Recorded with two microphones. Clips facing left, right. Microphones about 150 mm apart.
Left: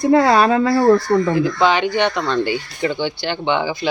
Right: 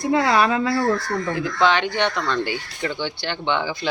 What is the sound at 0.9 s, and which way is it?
Speech, 75° left (ahead or behind).